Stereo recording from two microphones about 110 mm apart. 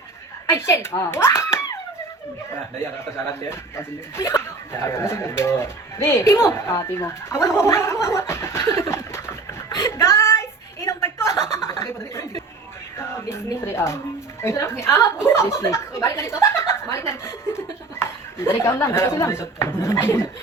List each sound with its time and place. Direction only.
0.5 s speech: 25° left (ahead or behind)
3.5 s speech: 25° left (ahead or behind)
8.0 s snicker: 25° left (ahead or behind)
11.8 s a sound: 25° left (ahead or behind)
13.0 s speech: 25° left (ahead or behind)